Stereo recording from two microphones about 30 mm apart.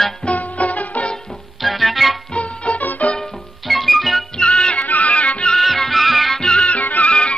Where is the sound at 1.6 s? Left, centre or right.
Centre.